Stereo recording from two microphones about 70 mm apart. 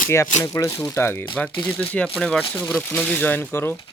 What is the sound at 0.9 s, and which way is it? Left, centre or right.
Speech, left.